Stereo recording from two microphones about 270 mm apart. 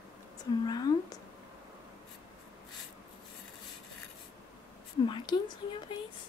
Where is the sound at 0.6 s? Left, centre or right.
Centre.